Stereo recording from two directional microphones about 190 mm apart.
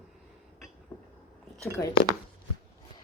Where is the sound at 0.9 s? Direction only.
10° left (ahead or behind).